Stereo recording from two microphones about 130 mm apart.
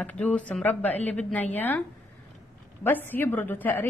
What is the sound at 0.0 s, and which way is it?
A woman's voice, 10° left (ahead or behind).